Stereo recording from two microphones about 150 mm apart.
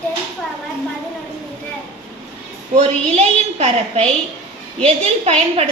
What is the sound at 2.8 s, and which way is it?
A woman's voice, 45° right (ahead or behind).